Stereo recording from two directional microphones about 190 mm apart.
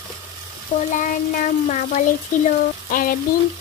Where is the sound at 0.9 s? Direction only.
40° left (ahead or behind).